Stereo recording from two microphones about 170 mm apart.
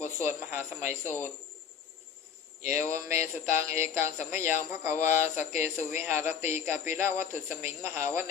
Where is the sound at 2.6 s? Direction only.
15° right (ahead or behind).